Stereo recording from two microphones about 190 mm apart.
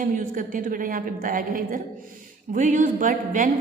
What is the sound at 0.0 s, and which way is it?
A woman's voice, 45° right (ahead or behind).